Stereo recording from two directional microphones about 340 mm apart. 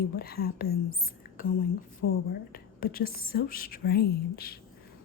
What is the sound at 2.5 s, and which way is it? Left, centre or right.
Speech, left.